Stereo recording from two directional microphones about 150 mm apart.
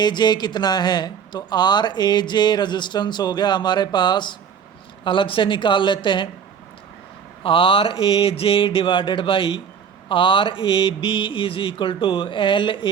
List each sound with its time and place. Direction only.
0.0 s speech: 30° left (ahead or behind)
7.4 s speech: 35° left (ahead or behind)